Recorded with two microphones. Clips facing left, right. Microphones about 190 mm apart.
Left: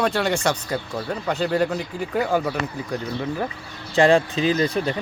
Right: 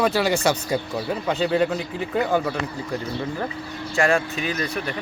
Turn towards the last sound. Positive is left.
turn(degrees=30)  # may be behind; listen again after turning